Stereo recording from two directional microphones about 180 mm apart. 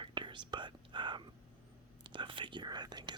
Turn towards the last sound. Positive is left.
turn(degrees=-25)  # may be behind; listen again after turning